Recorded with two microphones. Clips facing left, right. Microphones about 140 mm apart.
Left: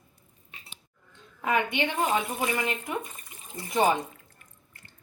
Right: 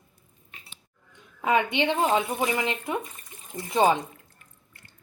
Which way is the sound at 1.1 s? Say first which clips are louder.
Right 3 dB; 20° right (ahead or behind).